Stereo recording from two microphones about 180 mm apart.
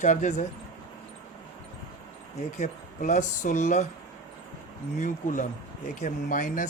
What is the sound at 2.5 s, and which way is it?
Speech, 45° left (ahead or behind).